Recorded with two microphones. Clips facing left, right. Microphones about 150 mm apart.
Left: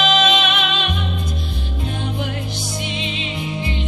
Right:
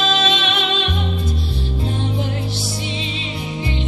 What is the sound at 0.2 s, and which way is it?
Music, 35° right (ahead or behind).